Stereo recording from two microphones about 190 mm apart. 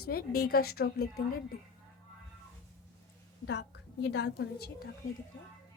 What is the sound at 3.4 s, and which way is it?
A woman's voice, 65° left (ahead or behind).